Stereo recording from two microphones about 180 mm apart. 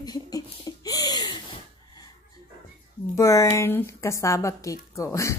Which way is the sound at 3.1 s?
15° left (ahead or behind).